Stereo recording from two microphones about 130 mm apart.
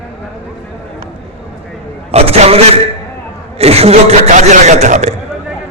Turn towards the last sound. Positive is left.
turn(degrees=-65)  # may be behind; listen again after turning